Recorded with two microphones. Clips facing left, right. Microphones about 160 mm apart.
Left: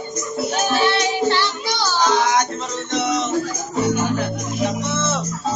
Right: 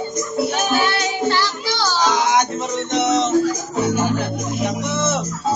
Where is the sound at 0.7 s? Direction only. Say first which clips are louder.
Left 1 dB; 25° left (ahead or behind).